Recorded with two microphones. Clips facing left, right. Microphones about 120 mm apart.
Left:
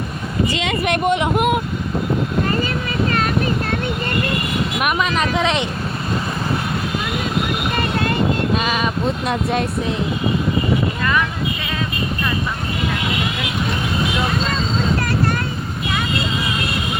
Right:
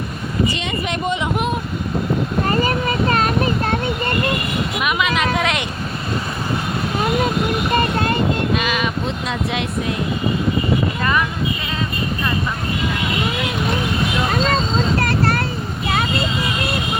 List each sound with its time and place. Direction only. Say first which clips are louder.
0.6 s speech: left 4 dB; 70° left (ahead or behind)
4.9 s speech: even; 35° left (ahead or behind)
8.5 s speech: left 1 dB; 35° left (ahead or behind)
9.2 s speech: left 3 dB; 50° left (ahead or behind)